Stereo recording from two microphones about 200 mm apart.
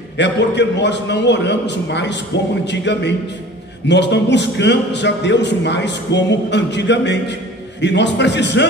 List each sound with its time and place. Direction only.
0.2 s a man's voice: 60° left (ahead or behind)